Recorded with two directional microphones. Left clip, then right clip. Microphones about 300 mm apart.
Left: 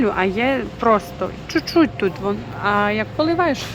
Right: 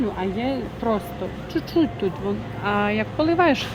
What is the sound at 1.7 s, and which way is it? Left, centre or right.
Speech, left.